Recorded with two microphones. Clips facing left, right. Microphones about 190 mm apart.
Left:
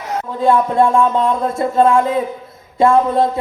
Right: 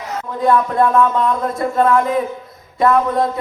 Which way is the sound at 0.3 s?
25° left (ahead or behind).